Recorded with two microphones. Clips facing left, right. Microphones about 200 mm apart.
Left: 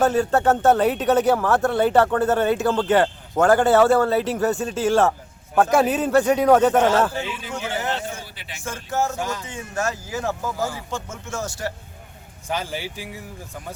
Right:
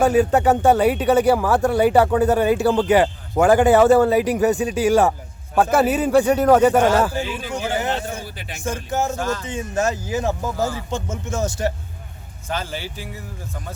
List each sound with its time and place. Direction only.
0.0 s speech: 15° right (ahead or behind)
7.7 s a sound: 15° right (ahead or behind)
8.6 s speech: 15° right (ahead or behind)
9.1 s a man's voice: 15° left (ahead or behind)
9.5 s speech: 20° right (ahead or behind)
12.5 s a man's voice: 15° left (ahead or behind)